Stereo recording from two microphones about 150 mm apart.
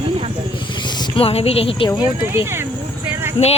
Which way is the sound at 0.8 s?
30° left (ahead or behind).